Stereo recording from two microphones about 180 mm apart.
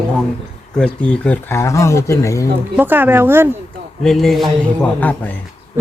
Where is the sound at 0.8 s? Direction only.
5° left (ahead or behind).